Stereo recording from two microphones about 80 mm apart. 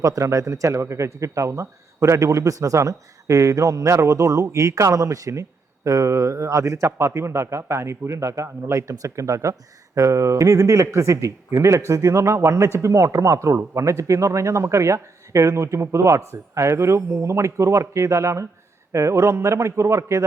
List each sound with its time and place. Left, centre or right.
0.0 s speech: right